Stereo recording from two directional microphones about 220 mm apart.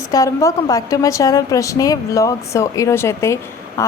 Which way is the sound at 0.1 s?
15° left (ahead or behind).